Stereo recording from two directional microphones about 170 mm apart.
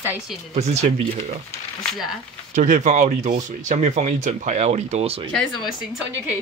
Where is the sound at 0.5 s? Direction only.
40° right (ahead or behind).